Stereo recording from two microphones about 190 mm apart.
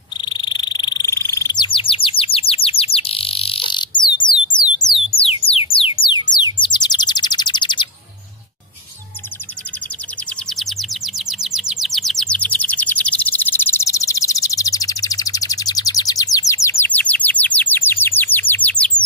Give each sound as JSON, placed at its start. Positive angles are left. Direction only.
{"t": 0.2, "sound": "frog", "side_deg": 25}
{"t": 5.1, "sound": "music", "side_deg": 30}
{"t": 6.3, "sound": "bird", "side_deg": 25}
{"t": 10.5, "sound": "bird", "side_deg": 0}